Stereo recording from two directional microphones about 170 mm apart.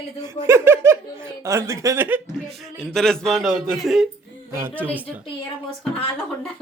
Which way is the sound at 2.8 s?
5° left (ahead or behind).